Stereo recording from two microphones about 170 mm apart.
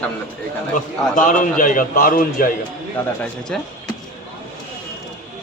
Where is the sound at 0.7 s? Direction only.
45° left (ahead or behind).